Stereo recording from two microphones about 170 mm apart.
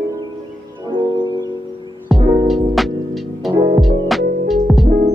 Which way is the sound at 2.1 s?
Centre (ahead or behind).